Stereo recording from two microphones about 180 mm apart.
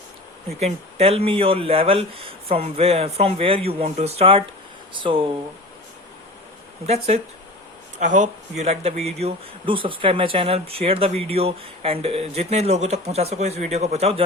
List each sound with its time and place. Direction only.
0.6 s a man's voice: 35° right (ahead or behind)
6.8 s a man's voice: 35° right (ahead or behind)